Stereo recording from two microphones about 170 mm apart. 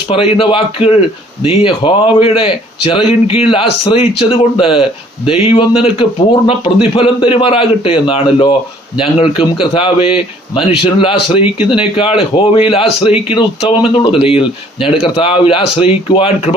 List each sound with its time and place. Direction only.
0.1 s a man's voice: 30° left (ahead or behind)